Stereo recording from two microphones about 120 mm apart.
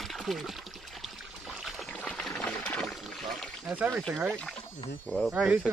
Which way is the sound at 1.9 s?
10° left (ahead or behind).